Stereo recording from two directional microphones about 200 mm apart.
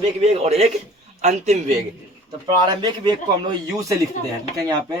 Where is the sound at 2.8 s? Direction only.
20° right (ahead or behind).